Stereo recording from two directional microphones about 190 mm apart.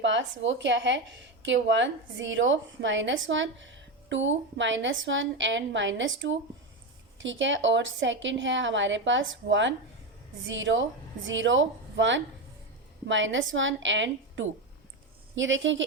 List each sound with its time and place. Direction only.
0.0 s a woman's voice: 70° right (ahead or behind)